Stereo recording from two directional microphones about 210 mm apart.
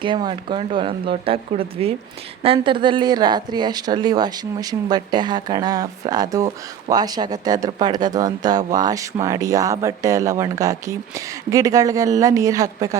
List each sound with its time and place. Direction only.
0.0 s speech: 20° right (ahead or behind)